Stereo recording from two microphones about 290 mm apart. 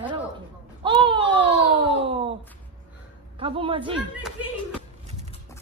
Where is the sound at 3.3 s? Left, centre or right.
Centre.